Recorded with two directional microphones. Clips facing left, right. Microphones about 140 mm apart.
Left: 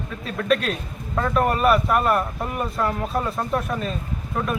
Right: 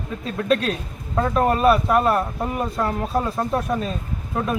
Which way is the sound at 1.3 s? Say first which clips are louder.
Right 1 dB; 25° right (ahead or behind).